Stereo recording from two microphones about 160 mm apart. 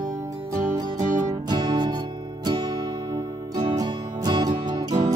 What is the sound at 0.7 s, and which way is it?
Music, 25° right (ahead or behind).